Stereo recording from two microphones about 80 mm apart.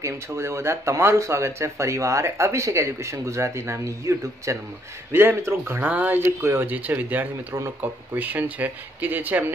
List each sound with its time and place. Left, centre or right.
0.0 s speech: right
5.1 s speech: right
6.6 s speech: right